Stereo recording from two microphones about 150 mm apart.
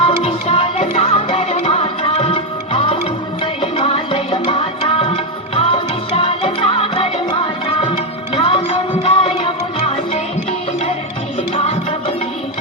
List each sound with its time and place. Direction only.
0.0 s music: 40° left (ahead or behind)
11.5 s music: 45° left (ahead or behind)